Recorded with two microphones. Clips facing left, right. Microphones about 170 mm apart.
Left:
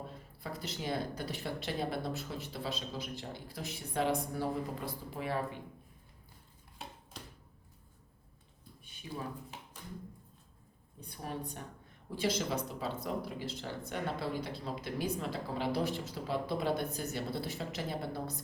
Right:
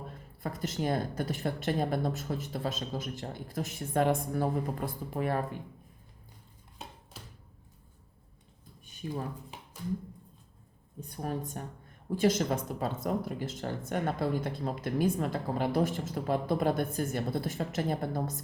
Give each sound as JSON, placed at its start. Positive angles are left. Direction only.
{"t": 0.1, "sound": "speech", "side_deg": -50}
{"t": 7.1, "sound": "a sound", "side_deg": -5}
{"t": 9.0, "sound": "speech", "side_deg": -45}
{"t": 11.0, "sound": "speech", "side_deg": -45}